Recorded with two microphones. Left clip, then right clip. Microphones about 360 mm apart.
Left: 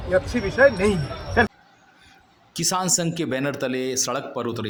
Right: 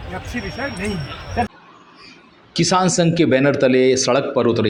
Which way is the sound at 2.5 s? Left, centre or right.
Left.